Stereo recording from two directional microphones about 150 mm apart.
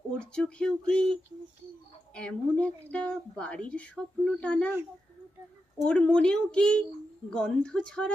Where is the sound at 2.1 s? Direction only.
5° left (ahead or behind).